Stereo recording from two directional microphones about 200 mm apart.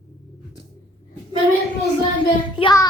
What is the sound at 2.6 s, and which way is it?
Child singing, 20° left (ahead or behind).